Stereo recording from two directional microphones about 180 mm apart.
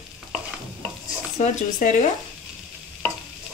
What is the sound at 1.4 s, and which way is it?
Speech, 45° left (ahead or behind).